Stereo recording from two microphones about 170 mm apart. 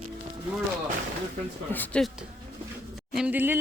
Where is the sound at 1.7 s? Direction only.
10° left (ahead or behind).